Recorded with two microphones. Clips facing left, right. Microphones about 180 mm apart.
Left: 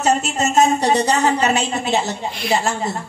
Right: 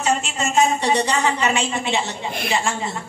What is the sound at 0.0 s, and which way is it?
A woman's voice, 40° left (ahead or behind).